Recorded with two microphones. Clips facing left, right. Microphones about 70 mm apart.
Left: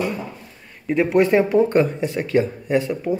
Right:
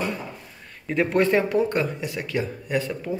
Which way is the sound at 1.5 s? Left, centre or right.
Left.